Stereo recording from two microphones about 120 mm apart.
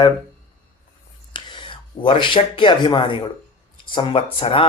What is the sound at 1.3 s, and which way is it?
Speech, 40° left (ahead or behind).